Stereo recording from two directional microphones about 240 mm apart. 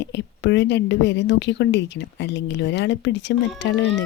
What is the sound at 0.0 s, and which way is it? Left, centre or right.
A woman's voice, left.